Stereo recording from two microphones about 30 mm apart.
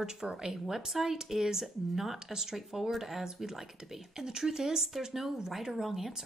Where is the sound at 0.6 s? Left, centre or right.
Centre.